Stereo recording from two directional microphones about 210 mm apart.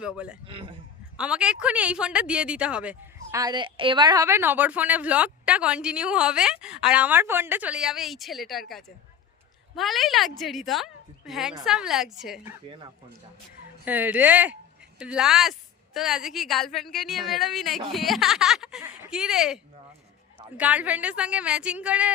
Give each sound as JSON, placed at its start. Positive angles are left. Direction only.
{"t": 0.0, "sound": "speech", "side_deg": -5}
{"t": 0.4, "sound": "a man's voice", "side_deg": -25}
{"t": 1.1, "sound": "speech", "side_deg": -5}
{"t": 9.7, "sound": "speech", "side_deg": 0}
{"t": 13.8, "sound": "speech", "side_deg": -10}
{"t": 20.6, "sound": "a woman's voice", "side_deg": -5}